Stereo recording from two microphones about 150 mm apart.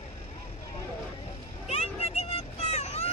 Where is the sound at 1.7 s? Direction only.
45° left (ahead or behind).